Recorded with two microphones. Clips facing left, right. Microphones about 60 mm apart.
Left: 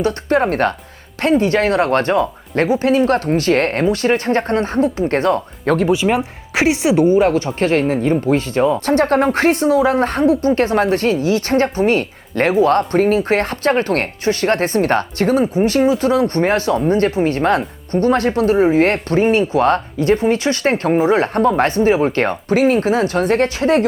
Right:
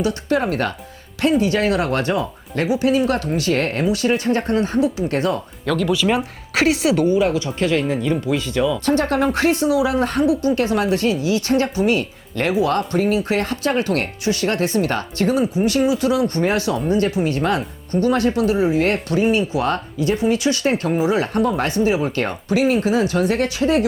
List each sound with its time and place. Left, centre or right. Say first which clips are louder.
0.0 s speech: left 4 dB; left
5.9 s speech: left 3 dB; left
7.2 s speech: left 4 dB; left